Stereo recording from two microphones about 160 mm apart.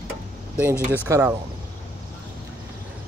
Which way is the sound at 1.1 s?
20° right (ahead or behind).